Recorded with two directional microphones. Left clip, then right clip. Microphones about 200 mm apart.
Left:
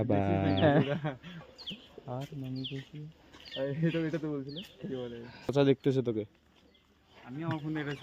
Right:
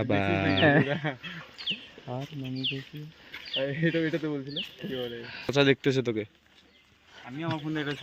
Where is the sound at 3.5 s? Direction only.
35° right (ahead or behind).